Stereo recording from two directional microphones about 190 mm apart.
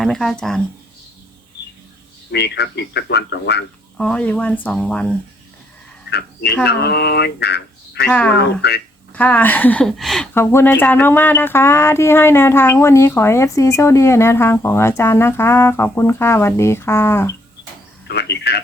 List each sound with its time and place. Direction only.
0.0 s speech: centre (ahead or behind)
2.3 s speech: 60° left (ahead or behind)
3.9 s speech: 5° left (ahead or behind)
6.1 s speech: 60° left (ahead or behind)
8.0 s speech: 10° left (ahead or behind)
8.6 s speech: 60° left (ahead or behind)
9.1 s speech: 10° left (ahead or behind)
10.3 s speech: 10° left (ahead or behind)
18.1 s speech: 60° left (ahead or behind)